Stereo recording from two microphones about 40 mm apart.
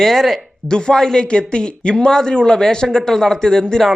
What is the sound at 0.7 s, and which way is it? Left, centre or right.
Speech, left.